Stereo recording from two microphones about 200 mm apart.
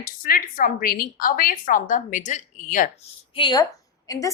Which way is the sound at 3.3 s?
25° left (ahead or behind).